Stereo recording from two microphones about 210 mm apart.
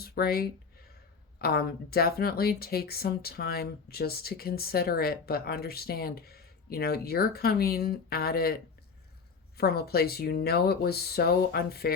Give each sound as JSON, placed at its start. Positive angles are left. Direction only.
{"t": 0.0, "sound": "speech", "side_deg": 50}
{"t": 9.6, "sound": "speech", "side_deg": 50}